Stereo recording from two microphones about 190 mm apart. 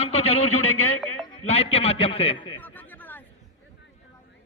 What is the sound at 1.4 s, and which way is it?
A man's voice, 30° left (ahead or behind).